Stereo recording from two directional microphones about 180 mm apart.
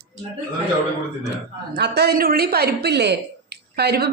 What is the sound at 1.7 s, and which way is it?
Speech, 65° right (ahead or behind).